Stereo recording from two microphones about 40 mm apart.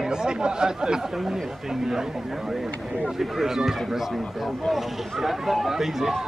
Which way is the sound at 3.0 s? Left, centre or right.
Centre.